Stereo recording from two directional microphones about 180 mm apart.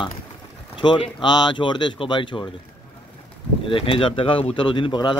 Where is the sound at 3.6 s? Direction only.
30° left (ahead or behind).